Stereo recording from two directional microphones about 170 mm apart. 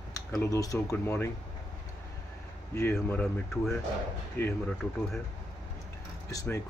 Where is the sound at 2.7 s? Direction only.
15° left (ahead or behind).